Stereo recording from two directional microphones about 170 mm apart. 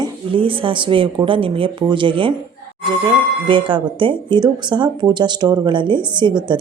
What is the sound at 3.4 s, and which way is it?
Speech, 30° right (ahead or behind).